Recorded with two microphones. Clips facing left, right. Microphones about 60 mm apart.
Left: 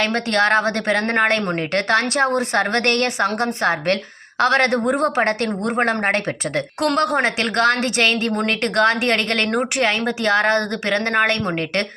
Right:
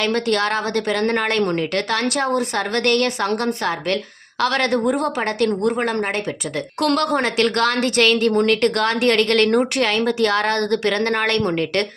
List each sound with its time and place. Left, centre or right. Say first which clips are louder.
0.0 s speech: left 1 dB; left
6.8 s a woman's voice: even; left
9.5 s a woman's voice: right 1 dB; centre